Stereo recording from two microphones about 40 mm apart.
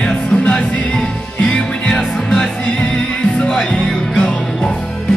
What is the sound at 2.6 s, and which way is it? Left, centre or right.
Music, left.